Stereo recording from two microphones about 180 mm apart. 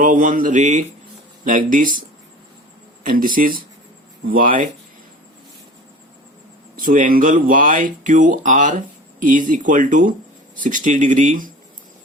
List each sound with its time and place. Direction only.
0.0 s speech: 45° right (ahead or behind)
3.0 s speech: 50° right (ahead or behind)
6.7 s speech: 50° right (ahead or behind)